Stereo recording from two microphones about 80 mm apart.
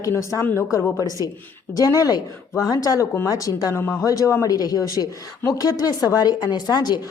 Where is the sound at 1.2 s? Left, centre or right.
Right.